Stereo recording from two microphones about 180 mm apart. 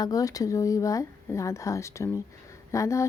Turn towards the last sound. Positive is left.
turn(degrees=15)  # may be behind; listen again after turning